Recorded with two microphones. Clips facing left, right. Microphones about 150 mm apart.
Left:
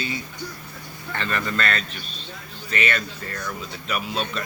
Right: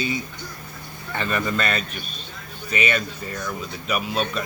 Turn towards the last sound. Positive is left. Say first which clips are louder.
# right 3 dB
turn(degrees=-10)  # may be behind; listen again after turning